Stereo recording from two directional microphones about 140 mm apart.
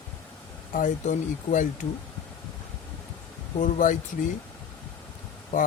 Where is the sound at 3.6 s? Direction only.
65° left (ahead or behind).